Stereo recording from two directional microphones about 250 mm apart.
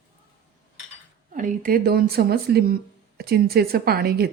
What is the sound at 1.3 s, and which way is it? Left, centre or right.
Speech, right.